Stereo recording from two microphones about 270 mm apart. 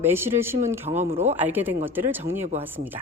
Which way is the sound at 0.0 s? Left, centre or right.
Centre.